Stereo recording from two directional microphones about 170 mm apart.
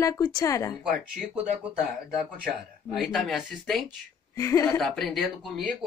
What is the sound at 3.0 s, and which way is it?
Speech, centre (ahead or behind).